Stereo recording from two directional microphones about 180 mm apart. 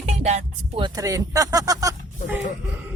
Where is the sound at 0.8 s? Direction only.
20° right (ahead or behind).